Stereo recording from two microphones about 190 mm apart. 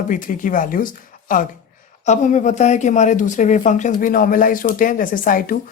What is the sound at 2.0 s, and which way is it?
Speech, 40° left (ahead or behind).